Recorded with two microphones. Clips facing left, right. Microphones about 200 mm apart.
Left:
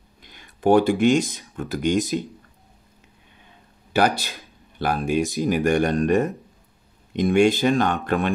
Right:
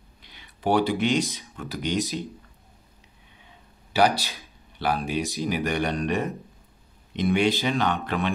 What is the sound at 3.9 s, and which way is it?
Speech, 50° left (ahead or behind).